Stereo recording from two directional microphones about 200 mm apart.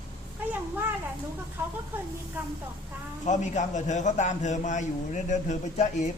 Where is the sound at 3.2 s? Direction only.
35° left (ahead or behind).